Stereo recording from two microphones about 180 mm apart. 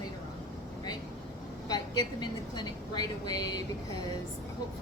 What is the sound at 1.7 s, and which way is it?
A woman's voice, 20° left (ahead or behind).